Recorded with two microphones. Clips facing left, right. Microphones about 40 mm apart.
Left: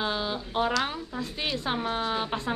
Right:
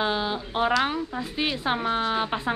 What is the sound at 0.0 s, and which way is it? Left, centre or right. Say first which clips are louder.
Speech: right 4 dB; centre.